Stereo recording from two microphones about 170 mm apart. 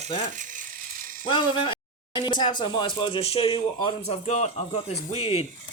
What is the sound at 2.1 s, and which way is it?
Speech, 25° left (ahead or behind).